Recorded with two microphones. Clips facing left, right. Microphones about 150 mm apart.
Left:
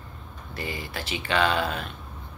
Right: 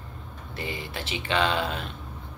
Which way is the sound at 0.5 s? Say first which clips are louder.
Even; 25° right (ahead or behind).